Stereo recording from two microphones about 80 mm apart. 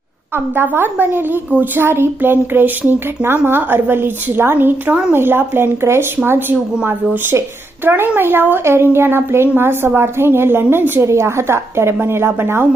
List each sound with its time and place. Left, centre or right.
0.3 s a woman's voice: right